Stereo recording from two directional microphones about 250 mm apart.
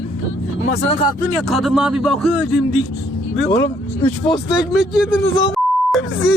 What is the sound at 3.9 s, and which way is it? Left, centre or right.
Speech, left.